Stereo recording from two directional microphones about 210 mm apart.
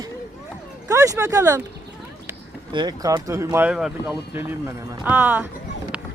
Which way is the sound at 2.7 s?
20° right (ahead or behind).